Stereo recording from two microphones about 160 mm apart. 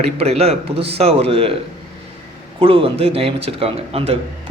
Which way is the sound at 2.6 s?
35° right (ahead or behind).